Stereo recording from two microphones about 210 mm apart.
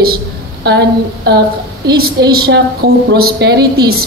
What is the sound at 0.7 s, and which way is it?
A woman's voice, 55° right (ahead or behind).